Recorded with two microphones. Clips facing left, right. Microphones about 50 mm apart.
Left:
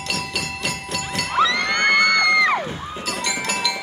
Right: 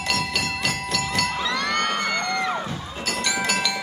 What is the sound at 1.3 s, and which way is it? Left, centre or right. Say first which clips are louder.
Music: left 5 dB; left.